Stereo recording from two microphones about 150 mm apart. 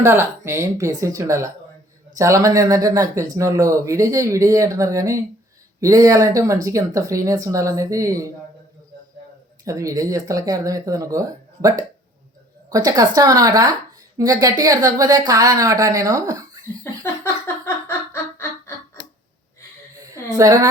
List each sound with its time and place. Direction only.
0.0 s speech: 15° right (ahead or behind)
9.6 s speech: 20° right (ahead or behind)
17.4 s a sound: 15° left (ahead or behind)
20.3 s speech: 20° right (ahead or behind)